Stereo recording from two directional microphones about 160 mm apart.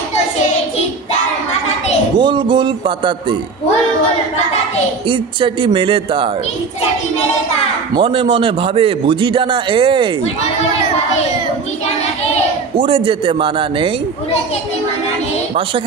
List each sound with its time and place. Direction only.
2.1 s speech: 30° right (ahead or behind)
5.0 s a man's voice: 35° right (ahead or behind)
7.9 s a man's voice: 35° right (ahead or behind)
12.7 s a man's voice: 35° right (ahead or behind)